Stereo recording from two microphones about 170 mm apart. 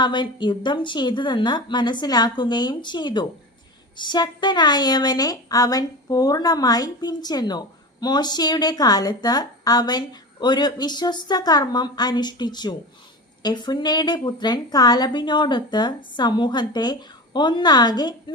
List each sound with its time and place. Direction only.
0.0 s a woman's voice: 25° left (ahead or behind)